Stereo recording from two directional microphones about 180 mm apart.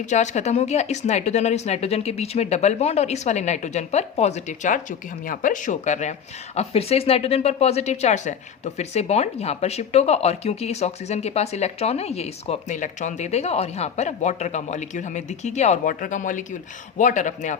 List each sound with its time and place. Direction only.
0.0 s a woman's voice: 40° left (ahead or behind)